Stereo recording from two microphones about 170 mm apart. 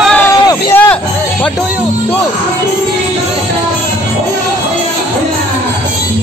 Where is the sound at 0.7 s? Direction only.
10° left (ahead or behind).